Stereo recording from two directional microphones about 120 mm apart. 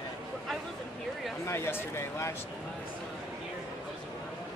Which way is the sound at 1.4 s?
20° left (ahead or behind).